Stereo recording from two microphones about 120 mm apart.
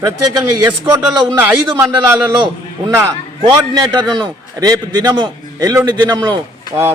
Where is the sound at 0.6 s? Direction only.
25° right (ahead or behind).